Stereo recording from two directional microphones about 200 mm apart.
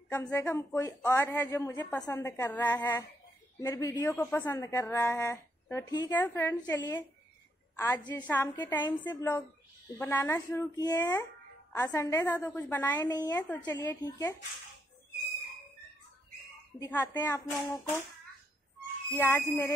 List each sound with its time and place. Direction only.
0.1 s speech: 10° left (ahead or behind)
12.9 s a woman's voice: 20° left (ahead or behind)
13.3 s speech: 10° left (ahead or behind)
16.8 s speech: 15° left (ahead or behind)
19.1 s speech: 10° left (ahead or behind)